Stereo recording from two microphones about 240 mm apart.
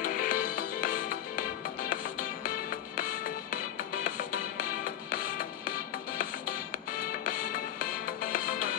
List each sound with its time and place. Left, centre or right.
0.0 s music: left
7.2 s music: left